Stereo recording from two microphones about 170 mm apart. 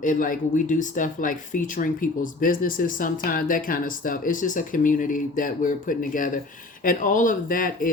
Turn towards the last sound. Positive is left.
turn(degrees=55)  # may be behind; listen again after turning